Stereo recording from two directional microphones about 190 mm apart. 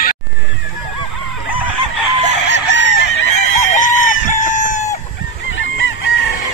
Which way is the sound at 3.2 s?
40° left (ahead or behind).